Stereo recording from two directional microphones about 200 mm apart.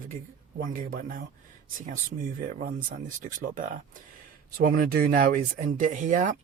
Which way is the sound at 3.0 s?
40° right (ahead or behind).